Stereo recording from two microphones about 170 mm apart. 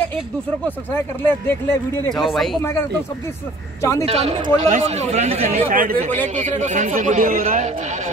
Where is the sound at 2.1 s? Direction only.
Centre (ahead or behind).